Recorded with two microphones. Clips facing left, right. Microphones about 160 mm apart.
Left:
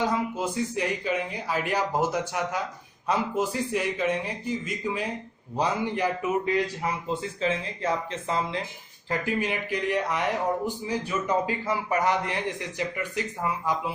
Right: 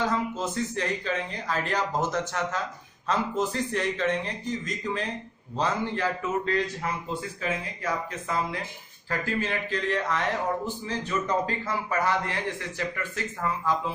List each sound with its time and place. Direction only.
0.0 s speech: 10° left (ahead or behind)